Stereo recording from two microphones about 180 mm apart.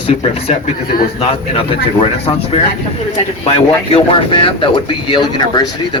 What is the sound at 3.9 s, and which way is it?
Speech, 30° left (ahead or behind).